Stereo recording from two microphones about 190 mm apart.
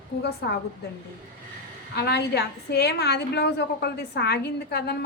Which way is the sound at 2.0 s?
60° left (ahead or behind).